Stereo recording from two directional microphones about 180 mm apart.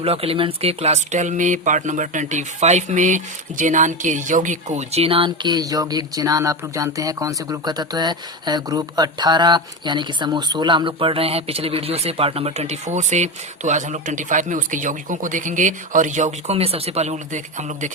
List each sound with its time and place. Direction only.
0.0 s speech: 30° right (ahead or behind)